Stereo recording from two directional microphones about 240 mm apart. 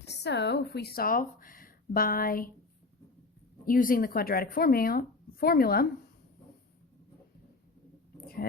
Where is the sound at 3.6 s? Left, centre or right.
Left.